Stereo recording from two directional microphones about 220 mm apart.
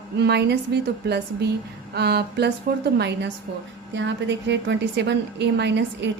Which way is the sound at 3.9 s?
55° right (ahead or behind).